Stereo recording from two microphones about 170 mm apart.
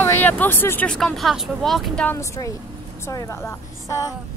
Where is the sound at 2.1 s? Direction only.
20° left (ahead or behind).